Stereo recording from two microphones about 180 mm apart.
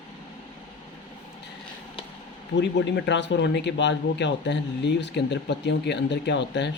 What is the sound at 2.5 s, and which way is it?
Speech, 75° left (ahead or behind).